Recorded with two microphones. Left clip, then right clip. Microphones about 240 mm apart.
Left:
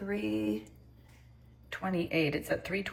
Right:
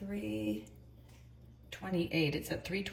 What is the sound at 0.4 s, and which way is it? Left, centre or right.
Speech, centre.